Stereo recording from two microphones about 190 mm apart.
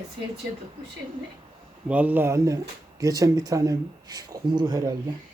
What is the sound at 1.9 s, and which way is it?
Speech, 10° right (ahead or behind).